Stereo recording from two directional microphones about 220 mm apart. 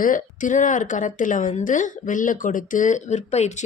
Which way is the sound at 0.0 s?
35° left (ahead or behind).